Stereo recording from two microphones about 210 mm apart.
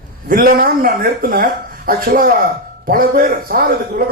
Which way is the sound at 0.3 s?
40° right (ahead or behind).